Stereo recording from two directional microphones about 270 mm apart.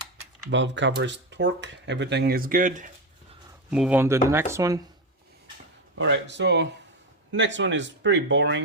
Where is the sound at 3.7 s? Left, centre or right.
Centre.